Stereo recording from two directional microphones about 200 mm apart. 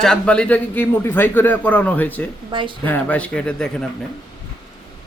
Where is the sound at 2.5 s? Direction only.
25° right (ahead or behind).